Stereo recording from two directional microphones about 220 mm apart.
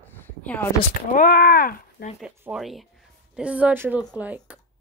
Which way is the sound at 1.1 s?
40° left (ahead or behind).